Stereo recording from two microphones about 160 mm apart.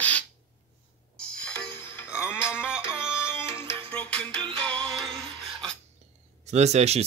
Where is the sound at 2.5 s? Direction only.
5° right (ahead or behind).